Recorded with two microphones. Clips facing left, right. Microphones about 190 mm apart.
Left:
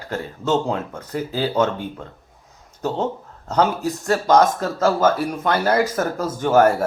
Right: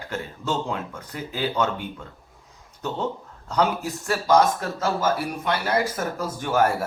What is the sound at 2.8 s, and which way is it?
Speech, 40° left (ahead or behind).